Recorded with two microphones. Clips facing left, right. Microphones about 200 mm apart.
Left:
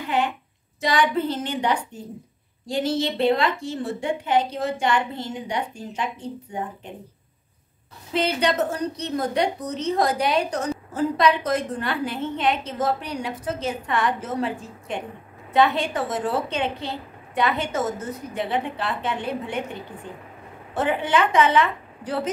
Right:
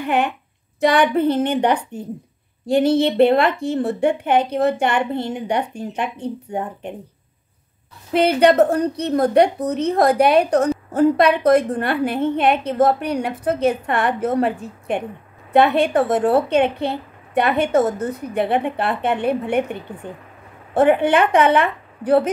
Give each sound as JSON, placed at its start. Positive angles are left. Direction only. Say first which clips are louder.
{"t": 0.0, "sound": "a woman's voice", "louder": "right 4 dB", "side_deg": -60}
{"t": 8.1, "sound": "a woman's voice", "louder": "right 8 dB", "side_deg": -55}